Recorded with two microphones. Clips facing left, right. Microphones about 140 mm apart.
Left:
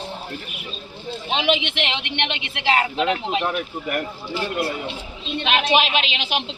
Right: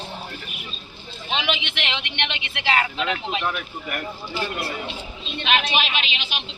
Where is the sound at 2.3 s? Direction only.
30° left (ahead or behind).